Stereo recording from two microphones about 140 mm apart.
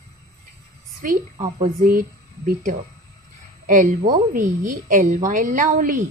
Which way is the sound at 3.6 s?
70° right (ahead or behind).